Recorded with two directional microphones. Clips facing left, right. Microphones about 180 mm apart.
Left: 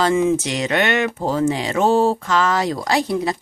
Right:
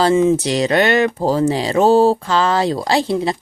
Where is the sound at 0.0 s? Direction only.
30° right (ahead or behind).